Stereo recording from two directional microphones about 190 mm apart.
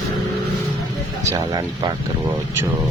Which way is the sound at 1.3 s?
20° right (ahead or behind).